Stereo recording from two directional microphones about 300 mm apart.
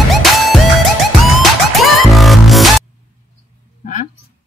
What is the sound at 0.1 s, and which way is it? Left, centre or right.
Music, centre.